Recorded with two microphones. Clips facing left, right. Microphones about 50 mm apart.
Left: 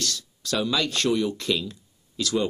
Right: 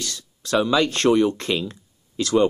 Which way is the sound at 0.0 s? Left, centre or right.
Right.